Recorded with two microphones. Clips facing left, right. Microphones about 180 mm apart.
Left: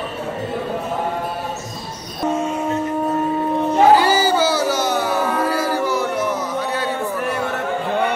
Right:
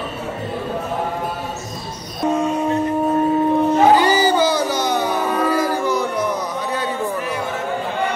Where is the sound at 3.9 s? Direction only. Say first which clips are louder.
Even; 5° left (ahead or behind).